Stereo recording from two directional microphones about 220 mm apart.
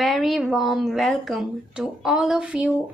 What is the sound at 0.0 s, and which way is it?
A woman's voice, centre (ahead or behind).